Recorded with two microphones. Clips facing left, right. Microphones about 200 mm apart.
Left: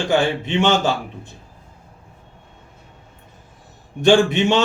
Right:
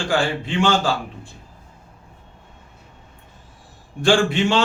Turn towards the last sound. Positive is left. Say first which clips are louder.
# left 3 dB
turn(degrees=20)  # may be behind; listen again after turning